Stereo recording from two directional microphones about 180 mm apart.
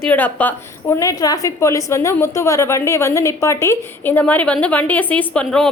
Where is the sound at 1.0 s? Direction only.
20° left (ahead or behind).